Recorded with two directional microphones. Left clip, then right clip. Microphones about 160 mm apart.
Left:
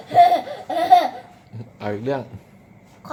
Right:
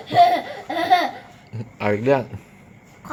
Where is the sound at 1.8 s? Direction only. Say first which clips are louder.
Right 6 dB; 40° right (ahead or behind).